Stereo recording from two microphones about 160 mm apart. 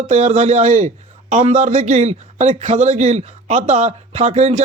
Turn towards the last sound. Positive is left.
turn(degrees=-45)  # may be behind; listen again after turning